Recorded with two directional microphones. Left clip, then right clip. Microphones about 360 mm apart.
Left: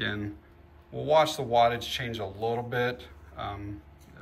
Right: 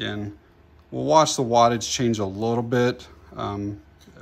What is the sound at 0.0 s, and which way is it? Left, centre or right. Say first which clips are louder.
Speech: right 2 dB; centre.